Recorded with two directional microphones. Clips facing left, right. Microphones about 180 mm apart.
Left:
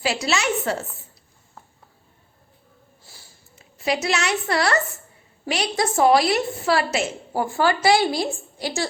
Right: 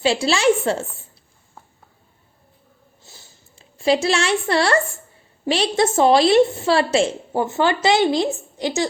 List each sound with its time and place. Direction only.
0.0 s a woman's voice: 30° right (ahead or behind)
3.0 s a sound: 25° right (ahead or behind)
5.5 s a woman's voice: 30° right (ahead or behind)